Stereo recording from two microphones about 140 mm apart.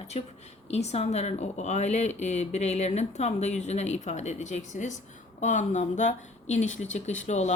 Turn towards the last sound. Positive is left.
turn(degrees=55)  # may be behind; listen again after turning